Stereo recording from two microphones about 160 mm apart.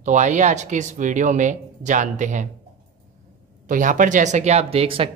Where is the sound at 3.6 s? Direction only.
55° right (ahead or behind); by 5.1 s 35° right (ahead or behind).